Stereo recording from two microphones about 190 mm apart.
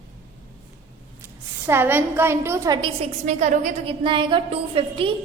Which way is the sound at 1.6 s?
10° right (ahead or behind).